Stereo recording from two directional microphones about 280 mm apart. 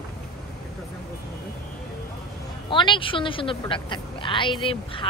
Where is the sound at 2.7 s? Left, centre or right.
Centre.